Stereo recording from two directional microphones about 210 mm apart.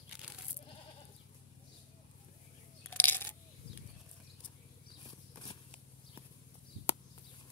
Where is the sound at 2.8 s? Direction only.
10° left (ahead or behind).